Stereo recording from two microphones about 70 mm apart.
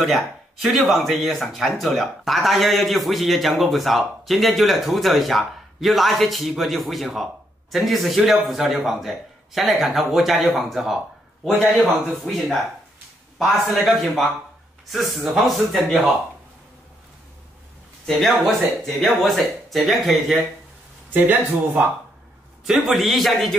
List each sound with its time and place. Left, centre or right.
0.0 s speech: centre
12.1 s speech: centre
13.8 s speech: centre
18.0 s speech: centre
21.1 s speech: right
22.7 s speech: centre